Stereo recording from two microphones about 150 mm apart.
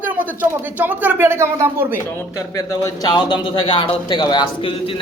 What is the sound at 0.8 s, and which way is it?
Speech, 10° right (ahead or behind).